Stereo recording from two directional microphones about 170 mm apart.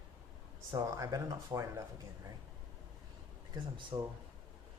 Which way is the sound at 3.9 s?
25° right (ahead or behind).